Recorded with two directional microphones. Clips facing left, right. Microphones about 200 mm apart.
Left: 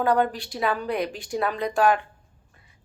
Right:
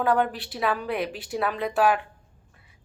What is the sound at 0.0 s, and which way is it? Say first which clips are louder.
A woman's voice: left 1 dB; centre (ahead or behind).